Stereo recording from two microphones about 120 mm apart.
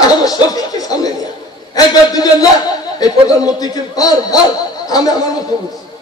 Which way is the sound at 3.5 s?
30° left (ahead or behind).